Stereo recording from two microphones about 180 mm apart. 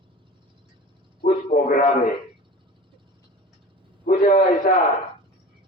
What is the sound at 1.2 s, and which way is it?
Speech, 45° left (ahead or behind).